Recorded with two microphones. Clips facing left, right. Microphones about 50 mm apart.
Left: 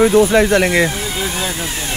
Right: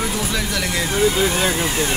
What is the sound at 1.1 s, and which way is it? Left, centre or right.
Speech, centre.